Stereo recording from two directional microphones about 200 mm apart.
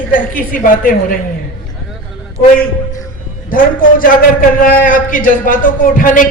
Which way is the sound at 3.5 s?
45° left (ahead or behind).